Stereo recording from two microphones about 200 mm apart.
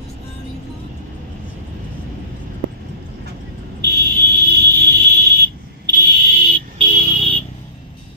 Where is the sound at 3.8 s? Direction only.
55° right (ahead or behind).